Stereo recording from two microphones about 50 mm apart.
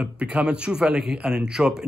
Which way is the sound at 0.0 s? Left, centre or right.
Right.